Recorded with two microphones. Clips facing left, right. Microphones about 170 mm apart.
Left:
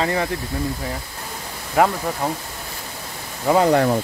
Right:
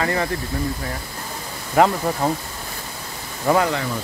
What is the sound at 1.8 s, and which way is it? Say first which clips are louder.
Speech: right 1 dB; 5° left (ahead or behind).